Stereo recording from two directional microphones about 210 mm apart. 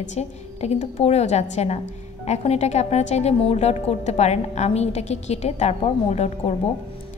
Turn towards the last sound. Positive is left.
turn(degrees=30)  # may be behind; listen again after turning